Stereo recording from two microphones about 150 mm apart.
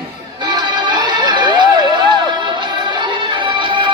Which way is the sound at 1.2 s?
30° right (ahead or behind).